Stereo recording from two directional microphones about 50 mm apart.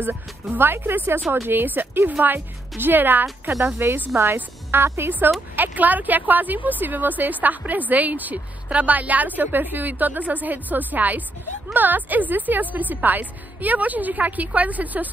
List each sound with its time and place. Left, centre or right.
0.0 s a woman's voice: right
3.5 s speech: right
4.6 s speech: right
5.6 s a woman's voice: right